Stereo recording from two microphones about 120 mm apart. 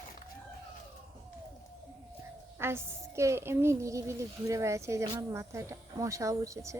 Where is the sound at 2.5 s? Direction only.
20° right (ahead or behind).